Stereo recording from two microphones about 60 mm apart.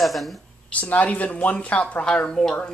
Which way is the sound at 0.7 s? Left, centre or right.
Left.